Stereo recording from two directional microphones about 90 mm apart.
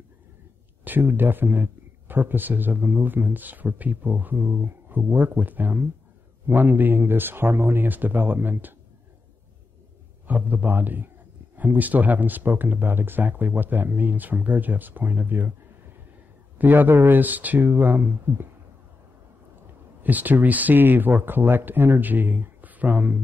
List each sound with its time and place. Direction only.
0.8 s speech: 20° right (ahead or behind)
10.2 s speech: 20° right (ahead or behind)
16.5 s speech: 20° right (ahead or behind)
20.0 s speech: 20° right (ahead or behind)